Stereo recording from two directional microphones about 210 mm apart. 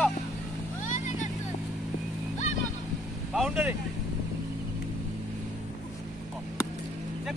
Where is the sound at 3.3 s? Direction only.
5° right (ahead or behind).